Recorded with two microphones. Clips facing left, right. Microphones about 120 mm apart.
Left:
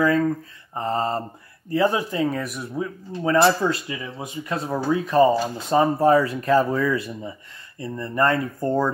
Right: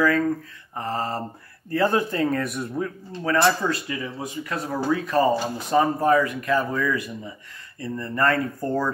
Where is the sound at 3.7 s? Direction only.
20° left (ahead or behind).